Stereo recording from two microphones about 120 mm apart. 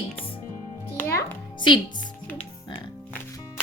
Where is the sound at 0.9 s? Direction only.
20° left (ahead or behind).